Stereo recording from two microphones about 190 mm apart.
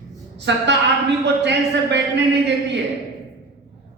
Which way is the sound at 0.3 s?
65° right (ahead or behind).